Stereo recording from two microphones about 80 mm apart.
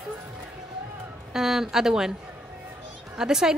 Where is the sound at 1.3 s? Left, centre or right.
Centre.